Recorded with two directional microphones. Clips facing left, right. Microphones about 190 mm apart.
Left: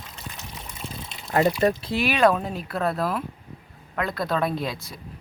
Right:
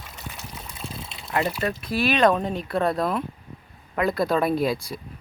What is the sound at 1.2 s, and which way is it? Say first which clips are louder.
Speech: left 5 dB; 40° left (ahead or behind).